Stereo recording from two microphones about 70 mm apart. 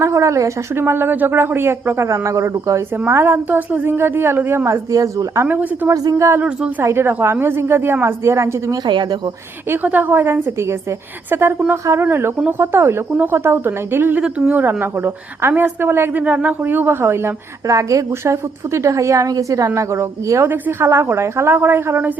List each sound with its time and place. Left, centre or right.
0.0 s a woman's voice: right
3.1 s a woman's voice: right
5.5 s a woman's voice: right
5.9 s a woman's voice: right
9.6 s a woman's voice: right
10.1 s a woman's voice: right
13.1 s a woman's voice: right
14.2 s a woman's voice: centre
14.6 s a woman's voice: right
16.2 s a woman's voice: right
20.4 s a woman's voice: right